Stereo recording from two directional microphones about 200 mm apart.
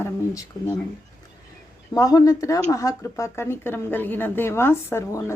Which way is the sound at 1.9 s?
20° left (ahead or behind).